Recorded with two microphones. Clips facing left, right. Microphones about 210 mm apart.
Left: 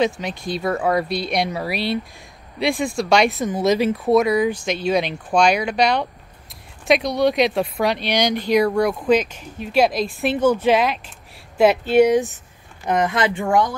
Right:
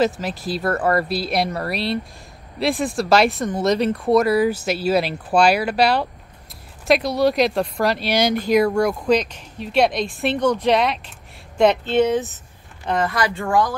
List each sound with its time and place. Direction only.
0.0 s a woman's voice: 5° right (ahead or behind); by 13.7 s 20° left (ahead or behind)